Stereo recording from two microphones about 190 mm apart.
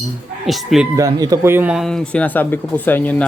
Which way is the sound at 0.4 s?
Centre (ahead or behind).